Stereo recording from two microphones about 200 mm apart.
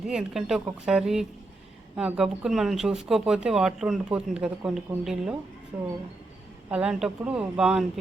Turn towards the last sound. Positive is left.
turn(degrees=-5)  # may be behind; listen again after turning